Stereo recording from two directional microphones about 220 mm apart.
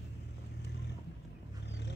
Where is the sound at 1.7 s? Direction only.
50° left (ahead or behind).